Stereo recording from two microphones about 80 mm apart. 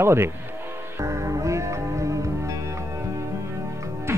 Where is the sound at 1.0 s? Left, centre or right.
Right.